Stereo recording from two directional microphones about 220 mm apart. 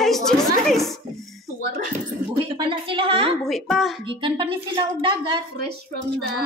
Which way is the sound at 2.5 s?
25° right (ahead or behind).